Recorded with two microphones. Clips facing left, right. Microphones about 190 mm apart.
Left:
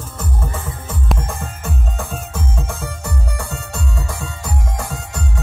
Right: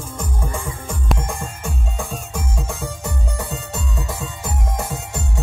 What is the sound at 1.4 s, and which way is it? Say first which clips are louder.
Music: left 2 dB; 15° right (ahead or behind).